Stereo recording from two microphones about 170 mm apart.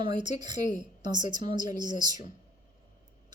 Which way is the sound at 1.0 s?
25° right (ahead or behind).